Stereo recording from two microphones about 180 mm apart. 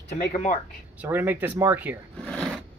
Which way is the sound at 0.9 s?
10° right (ahead or behind).